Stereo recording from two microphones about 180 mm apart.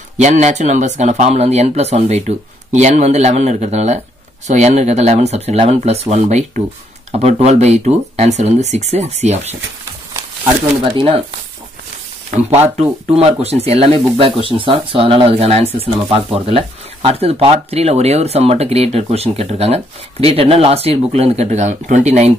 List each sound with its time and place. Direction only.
0.2 s speech: 40° right (ahead or behind)
10.8 s speech: 30° right (ahead or behind)
13.1 s speech: 35° right (ahead or behind)